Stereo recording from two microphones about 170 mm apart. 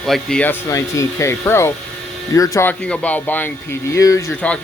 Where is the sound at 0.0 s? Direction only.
5° left (ahead or behind).